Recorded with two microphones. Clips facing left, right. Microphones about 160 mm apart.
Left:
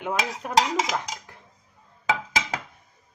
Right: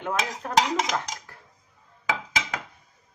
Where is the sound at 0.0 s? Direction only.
10° left (ahead or behind).